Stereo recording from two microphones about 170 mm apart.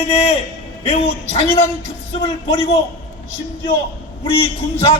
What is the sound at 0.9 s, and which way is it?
Speech, 35° left (ahead or behind).